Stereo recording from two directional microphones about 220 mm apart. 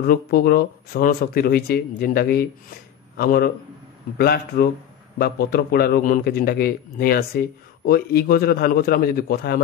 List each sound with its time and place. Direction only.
0.0 s a man's voice: 45° left (ahead or behind)